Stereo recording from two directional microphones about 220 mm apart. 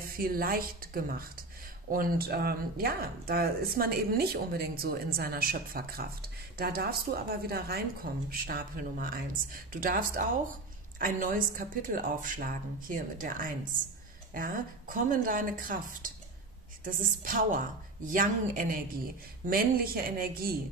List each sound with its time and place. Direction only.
0.1 s a woman's voice: 40° right (ahead or behind)